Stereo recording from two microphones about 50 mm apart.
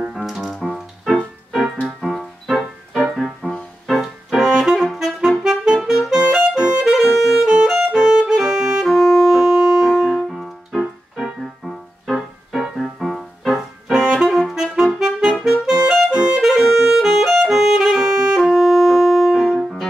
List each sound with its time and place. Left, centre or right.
0.3 s music: centre
3.4 s music: centre
3.8 s music: centre
4.4 s saxophone: centre
6.9 s music: centre
13.8 s saxophone: centre
14.2 s saxophone: centre
14.5 s music: centre